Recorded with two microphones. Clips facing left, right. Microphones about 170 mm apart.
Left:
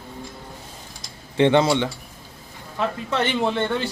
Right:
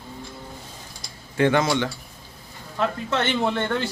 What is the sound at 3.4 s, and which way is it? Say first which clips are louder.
Speech: left 1 dB; centre (ahead or behind).